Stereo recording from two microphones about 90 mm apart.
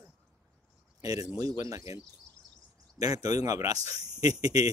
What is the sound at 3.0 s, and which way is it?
Speech, 45° right (ahead or behind).